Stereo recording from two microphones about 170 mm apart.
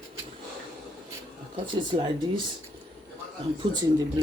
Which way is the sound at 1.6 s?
30° right (ahead or behind).